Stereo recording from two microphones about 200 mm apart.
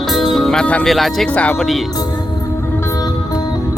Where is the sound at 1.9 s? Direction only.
20° left (ahead or behind).